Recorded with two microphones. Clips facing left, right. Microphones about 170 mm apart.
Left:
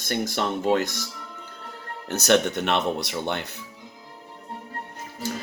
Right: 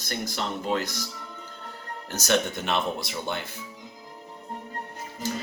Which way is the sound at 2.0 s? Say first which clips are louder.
Left 5 dB; 65° left (ahead or behind).